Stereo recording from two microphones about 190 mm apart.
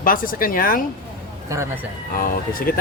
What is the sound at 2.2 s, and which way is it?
Speech, 50° left (ahead or behind).